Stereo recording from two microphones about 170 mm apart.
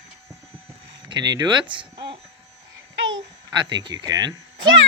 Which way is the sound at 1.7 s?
30° right (ahead or behind).